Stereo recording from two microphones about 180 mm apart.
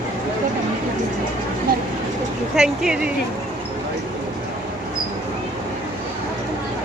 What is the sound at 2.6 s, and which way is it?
Speech, 5° right (ahead or behind).